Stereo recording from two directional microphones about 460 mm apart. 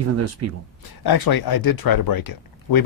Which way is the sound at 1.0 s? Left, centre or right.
Left.